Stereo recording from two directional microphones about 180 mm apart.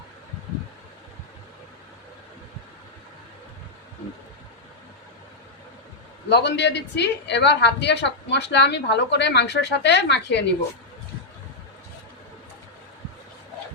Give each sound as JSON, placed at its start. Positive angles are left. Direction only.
{"t": 6.2, "sound": "a woman's voice", "side_deg": 65}